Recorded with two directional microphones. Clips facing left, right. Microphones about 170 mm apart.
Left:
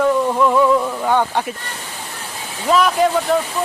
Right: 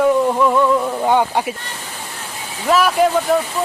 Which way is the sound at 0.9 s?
20° right (ahead or behind).